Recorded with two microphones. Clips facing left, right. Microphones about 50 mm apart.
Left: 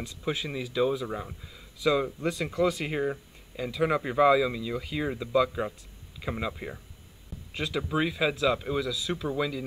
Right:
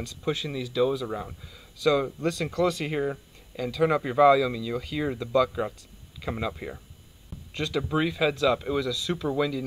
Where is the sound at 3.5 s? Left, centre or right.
Centre.